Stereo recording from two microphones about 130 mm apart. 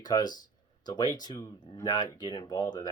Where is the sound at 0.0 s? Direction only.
30° left (ahead or behind).